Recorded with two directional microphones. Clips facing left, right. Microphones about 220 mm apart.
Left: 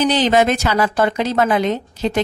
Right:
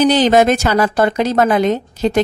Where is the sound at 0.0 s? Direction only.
45° right (ahead or behind).